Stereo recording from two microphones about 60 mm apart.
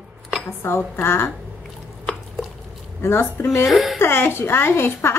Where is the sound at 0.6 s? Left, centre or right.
Left.